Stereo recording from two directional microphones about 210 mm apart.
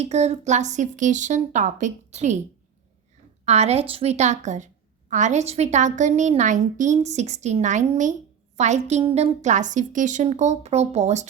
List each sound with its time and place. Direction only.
0.0 s a woman's voice: 30° right (ahead or behind)
3.4 s a woman's voice: 30° right (ahead or behind)